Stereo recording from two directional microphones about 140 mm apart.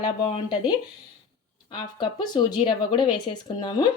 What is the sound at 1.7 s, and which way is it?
Speech, 30° left (ahead or behind).